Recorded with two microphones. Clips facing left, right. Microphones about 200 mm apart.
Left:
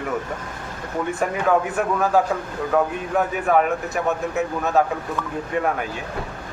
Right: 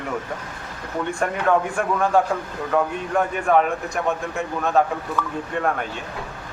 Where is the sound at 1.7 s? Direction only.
5° left (ahead or behind).